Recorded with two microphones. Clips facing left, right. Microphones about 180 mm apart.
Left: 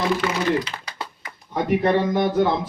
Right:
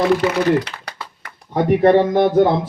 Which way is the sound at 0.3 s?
60° right (ahead or behind).